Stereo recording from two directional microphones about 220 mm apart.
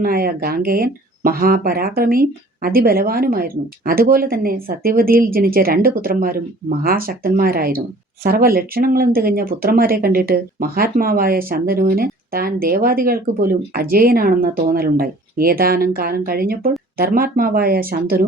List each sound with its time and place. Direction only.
0.0 s speech: 40° right (ahead or behind)